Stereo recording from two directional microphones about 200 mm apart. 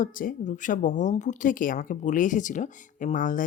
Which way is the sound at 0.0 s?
45° left (ahead or behind).